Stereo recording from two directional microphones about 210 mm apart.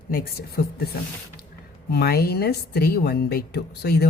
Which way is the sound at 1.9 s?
50° left (ahead or behind).